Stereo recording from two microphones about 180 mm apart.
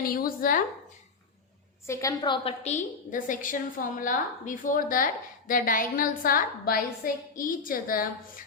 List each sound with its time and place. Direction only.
0.0 s speech: 55° left (ahead or behind)
1.9 s a woman's voice: 20° left (ahead or behind)
2.6 s a woman's voice: 45° left (ahead or behind)